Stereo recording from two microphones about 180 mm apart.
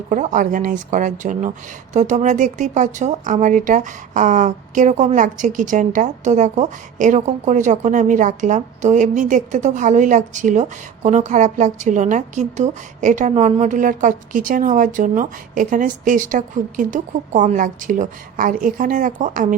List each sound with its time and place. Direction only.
0.1 s speech: 45° right (ahead or behind)